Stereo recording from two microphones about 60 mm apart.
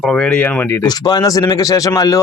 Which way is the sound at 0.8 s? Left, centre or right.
Left.